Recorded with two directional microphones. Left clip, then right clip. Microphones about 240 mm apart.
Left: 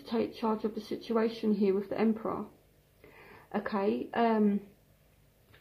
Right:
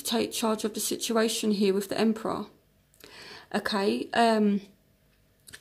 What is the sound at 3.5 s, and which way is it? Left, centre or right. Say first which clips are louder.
Speech: right 4 dB; right.